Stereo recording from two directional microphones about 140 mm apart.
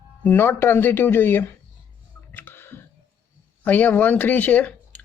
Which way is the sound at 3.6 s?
10° left (ahead or behind).